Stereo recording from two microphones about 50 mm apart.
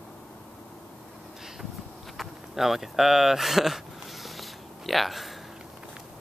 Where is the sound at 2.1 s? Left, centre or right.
Centre.